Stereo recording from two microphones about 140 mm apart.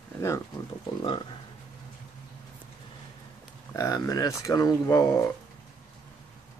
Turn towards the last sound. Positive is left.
turn(degrees=25)  # may be behind; listen again after turning